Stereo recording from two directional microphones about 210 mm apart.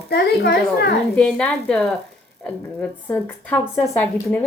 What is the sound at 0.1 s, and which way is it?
Speech, 50° left (ahead or behind).